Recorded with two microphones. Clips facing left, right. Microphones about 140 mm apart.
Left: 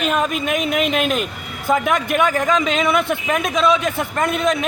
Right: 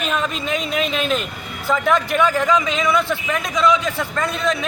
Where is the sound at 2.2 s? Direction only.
55° left (ahead or behind).